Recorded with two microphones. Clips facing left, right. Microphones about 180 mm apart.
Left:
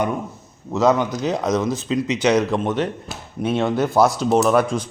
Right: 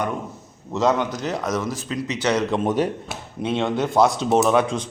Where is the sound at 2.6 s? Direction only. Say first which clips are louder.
Right 1 dB; 10° right (ahead or behind).